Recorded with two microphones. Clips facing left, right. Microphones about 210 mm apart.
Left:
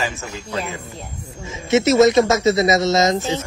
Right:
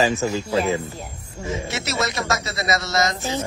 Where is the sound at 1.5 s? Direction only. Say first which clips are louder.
Left 13 dB; 20° left (ahead or behind).